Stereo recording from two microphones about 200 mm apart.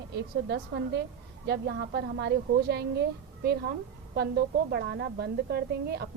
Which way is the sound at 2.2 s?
55° right (ahead or behind).